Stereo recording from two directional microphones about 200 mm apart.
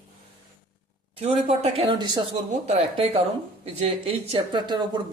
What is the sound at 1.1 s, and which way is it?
Speech, 30° right (ahead or behind).